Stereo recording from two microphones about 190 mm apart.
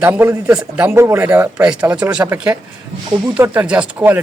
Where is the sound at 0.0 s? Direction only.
10° right (ahead or behind).